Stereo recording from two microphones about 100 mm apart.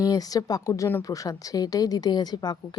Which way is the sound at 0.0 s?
40° left (ahead or behind).